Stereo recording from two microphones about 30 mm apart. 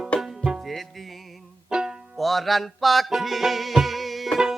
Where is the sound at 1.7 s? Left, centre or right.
Right.